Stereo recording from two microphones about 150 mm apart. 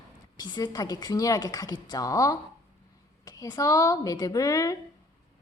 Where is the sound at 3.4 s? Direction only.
20° left (ahead or behind).